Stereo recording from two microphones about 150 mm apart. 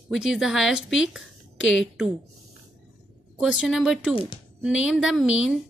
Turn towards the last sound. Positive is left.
turn(degrees=-5)  # may be behind; listen again after turning